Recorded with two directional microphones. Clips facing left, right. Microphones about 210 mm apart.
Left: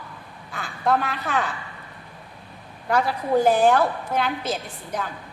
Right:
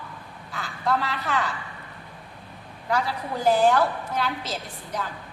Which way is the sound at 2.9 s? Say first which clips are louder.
Left 6 dB; 50° left (ahead or behind).